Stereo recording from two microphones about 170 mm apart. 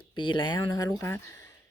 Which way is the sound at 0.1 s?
25° left (ahead or behind).